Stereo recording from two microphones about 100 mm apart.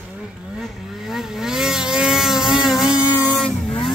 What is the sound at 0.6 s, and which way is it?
Vehicle, centre (ahead or behind).